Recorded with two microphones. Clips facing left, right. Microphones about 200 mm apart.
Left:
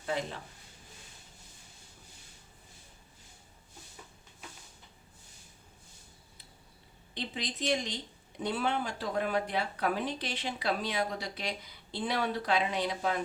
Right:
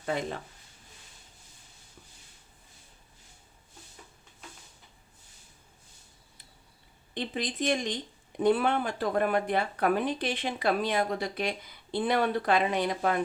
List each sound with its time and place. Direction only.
7.1 s speech: 50° right (ahead or behind)